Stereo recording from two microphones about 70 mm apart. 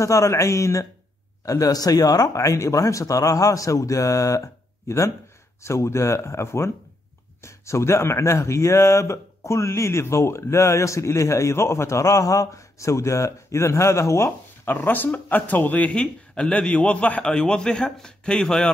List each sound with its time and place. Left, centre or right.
0.0 s speech: left
14.7 s speech: left; by 18.7 s centre